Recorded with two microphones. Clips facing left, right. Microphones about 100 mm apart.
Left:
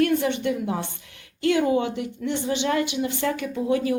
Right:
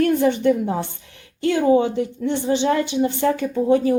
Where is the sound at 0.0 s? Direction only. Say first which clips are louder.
Right 5 dB; 35° right (ahead or behind).